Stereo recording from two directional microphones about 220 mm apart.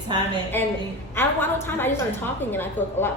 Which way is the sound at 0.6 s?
10° left (ahead or behind).